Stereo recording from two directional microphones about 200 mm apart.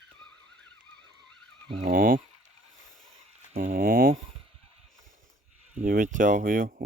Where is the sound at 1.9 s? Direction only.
45° right (ahead or behind).